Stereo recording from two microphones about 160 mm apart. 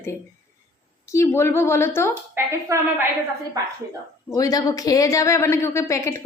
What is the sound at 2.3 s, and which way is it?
Speech, 15° right (ahead or behind).